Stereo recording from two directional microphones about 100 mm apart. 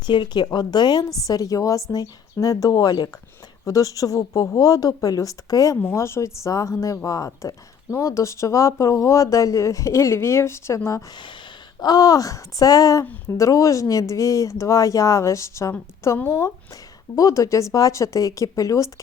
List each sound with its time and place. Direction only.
0.0 s speech: 50° left (ahead or behind); by 10.8 s 30° left (ahead or behind)
11.8 s speech: 40° left (ahead or behind)
16.1 s speech: 20° left (ahead or behind)
17.2 s speech: 35° left (ahead or behind)